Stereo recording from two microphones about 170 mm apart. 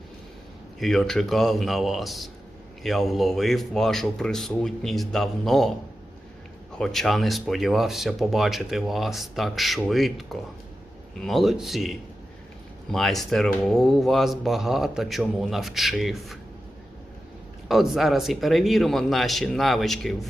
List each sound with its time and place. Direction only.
0.8 s speech: centre (ahead or behind)
6.7 s speech: centre (ahead or behind)
17.7 s speech: centre (ahead or behind)